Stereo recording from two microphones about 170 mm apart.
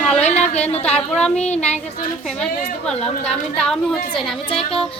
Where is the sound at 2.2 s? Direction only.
5° left (ahead or behind).